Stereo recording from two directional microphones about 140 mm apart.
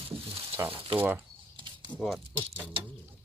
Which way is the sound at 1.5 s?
35° right (ahead or behind).